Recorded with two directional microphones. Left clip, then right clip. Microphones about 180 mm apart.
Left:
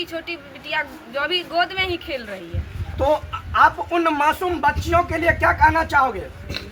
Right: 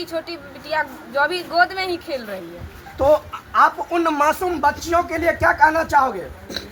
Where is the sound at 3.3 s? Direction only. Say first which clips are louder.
Even; 20° right (ahead or behind).